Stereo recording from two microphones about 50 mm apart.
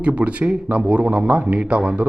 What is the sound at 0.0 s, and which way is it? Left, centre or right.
Speech, right.